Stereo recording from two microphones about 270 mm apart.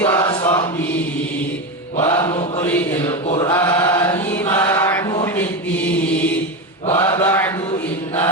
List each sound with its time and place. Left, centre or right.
0.0 s chant: centre
2.0 s mantra: centre
3.2 s mantra: centre
3.5 s chant: centre
6.9 s mantra: centre